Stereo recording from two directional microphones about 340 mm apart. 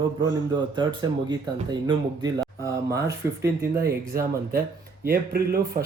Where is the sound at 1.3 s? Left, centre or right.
Centre.